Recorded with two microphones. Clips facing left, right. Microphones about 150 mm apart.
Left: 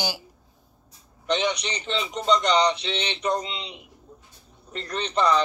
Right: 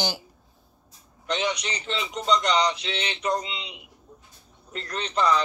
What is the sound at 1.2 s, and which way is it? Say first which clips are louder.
A man's voice: left 3 dB; centre (ahead or behind).